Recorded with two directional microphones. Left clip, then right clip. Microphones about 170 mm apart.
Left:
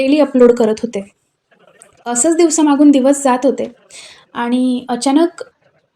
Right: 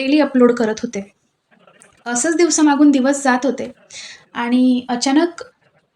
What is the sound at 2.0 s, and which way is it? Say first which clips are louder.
A woman's voice: left 3 dB; 35° left (ahead or behind).